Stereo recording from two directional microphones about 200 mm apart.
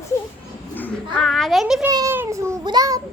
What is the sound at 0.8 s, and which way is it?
Children playing, 5° left (ahead or behind).